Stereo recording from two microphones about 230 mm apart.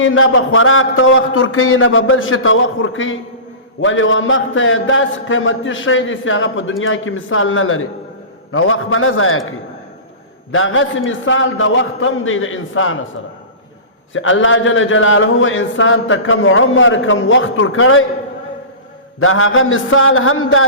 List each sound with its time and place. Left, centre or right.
0.0 s a man's voice: left
10.5 s a man's voice: left
14.1 s a man's voice: left
19.2 s a man's voice: left